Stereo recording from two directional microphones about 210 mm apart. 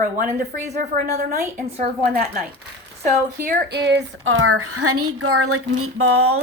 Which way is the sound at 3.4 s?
55° right (ahead or behind).